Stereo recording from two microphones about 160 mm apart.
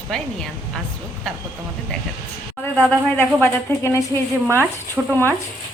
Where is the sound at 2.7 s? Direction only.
10° left (ahead or behind).